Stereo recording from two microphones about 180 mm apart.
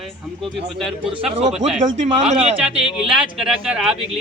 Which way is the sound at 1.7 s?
40° right (ahead or behind).